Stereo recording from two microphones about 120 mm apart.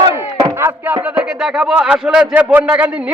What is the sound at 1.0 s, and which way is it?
A man's voice, 5° right (ahead or behind).